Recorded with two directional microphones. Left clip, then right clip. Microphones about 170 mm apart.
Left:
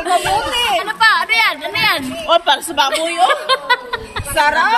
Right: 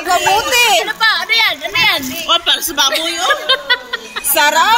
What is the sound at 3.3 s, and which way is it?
Speech, 5° left (ahead or behind).